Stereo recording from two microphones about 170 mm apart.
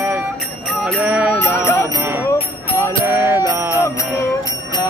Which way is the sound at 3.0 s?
10° right (ahead or behind).